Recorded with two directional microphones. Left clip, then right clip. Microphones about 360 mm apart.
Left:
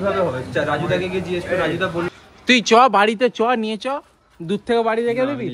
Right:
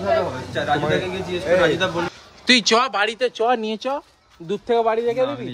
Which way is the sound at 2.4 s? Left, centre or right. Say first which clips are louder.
Left 3 dB; centre.